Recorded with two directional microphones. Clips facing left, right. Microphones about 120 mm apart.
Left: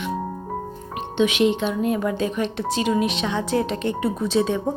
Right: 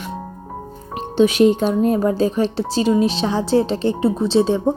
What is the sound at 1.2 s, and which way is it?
A woman's voice, 40° right (ahead or behind).